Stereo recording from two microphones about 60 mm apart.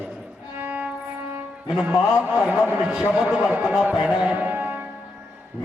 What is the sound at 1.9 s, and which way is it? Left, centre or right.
A man's voice, centre.